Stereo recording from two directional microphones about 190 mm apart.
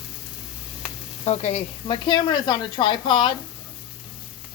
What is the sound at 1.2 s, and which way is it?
Speech, 35° left (ahead or behind).